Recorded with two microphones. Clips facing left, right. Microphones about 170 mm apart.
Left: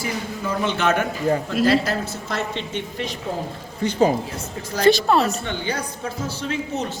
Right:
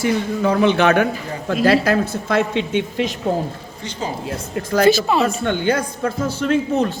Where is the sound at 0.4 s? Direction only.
65° right (ahead or behind).